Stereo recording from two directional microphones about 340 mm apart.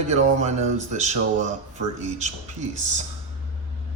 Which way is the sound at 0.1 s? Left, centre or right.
Centre.